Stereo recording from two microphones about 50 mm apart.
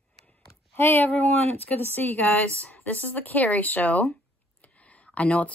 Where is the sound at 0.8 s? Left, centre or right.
Left.